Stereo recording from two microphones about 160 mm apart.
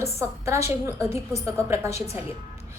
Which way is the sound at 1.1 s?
15° right (ahead or behind).